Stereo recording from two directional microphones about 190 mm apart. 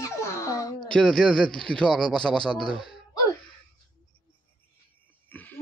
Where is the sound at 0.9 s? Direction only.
5° left (ahead or behind).